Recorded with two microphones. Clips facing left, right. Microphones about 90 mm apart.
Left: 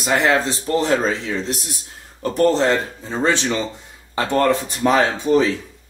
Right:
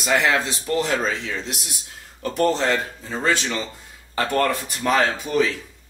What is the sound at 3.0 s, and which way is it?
Speech, 25° left (ahead or behind).